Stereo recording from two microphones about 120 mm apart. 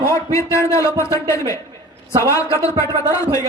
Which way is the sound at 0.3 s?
25° left (ahead or behind).